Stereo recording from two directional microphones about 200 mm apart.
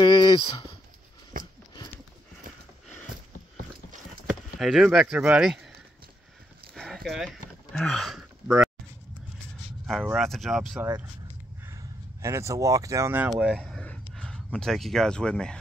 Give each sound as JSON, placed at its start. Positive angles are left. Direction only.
{"t": 0.0, "sound": "speech", "side_deg": 25}
{"t": 1.3, "sound": "a sound", "side_deg": -45}
{"t": 4.3, "sound": "speech", "side_deg": 0}
{"t": 6.7, "sound": "a sound", "side_deg": 0}
{"t": 10.0, "sound": "speech", "side_deg": 0}
{"t": 11.6, "sound": "speech", "side_deg": -15}